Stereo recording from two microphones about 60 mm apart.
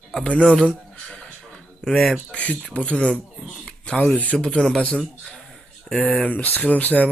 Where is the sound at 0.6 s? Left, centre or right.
Centre.